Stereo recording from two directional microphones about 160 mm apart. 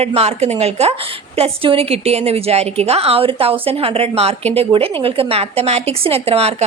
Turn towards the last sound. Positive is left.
turn(degrees=-40)  # may be behind; listen again after turning